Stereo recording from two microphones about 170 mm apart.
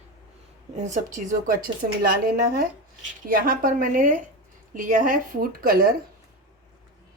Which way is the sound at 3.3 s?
55° right (ahead or behind).